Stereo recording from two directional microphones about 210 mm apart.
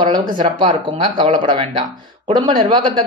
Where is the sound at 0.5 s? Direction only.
25° right (ahead or behind).